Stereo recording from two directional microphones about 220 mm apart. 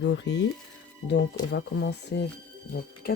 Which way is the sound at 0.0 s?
55° left (ahead or behind).